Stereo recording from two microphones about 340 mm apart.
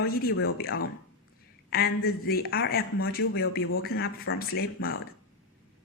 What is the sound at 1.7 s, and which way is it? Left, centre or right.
Speech, left.